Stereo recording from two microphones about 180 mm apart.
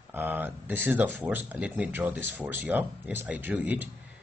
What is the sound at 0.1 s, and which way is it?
Speech, 10° right (ahead or behind).